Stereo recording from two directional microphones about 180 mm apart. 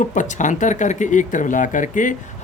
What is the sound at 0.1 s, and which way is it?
Speech, 45° left (ahead or behind).